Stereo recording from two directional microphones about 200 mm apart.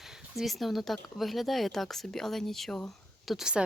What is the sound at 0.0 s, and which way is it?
Speech, centre (ahead or behind).